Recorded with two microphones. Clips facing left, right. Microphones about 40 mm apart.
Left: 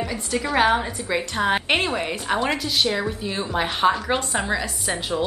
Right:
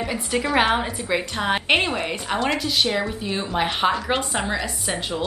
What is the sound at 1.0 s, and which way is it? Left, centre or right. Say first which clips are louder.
A woman's voice: left 1 dB; centre.